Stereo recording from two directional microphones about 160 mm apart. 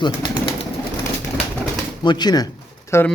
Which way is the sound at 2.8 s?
15° left (ahead or behind).